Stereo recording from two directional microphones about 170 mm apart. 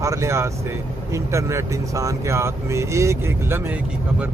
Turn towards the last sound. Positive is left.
turn(degrees=-15)  # may be behind; listen again after turning